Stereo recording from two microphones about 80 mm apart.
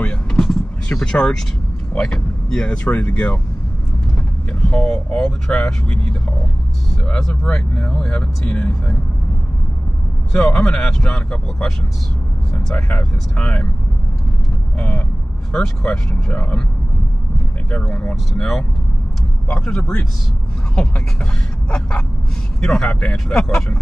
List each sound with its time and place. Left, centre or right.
0.0 s vehicle: centre
2.0 s speech: centre
4.5 s speech: centre
10.4 s speech: centre
14.8 s speech: centre
17.6 s speech: centre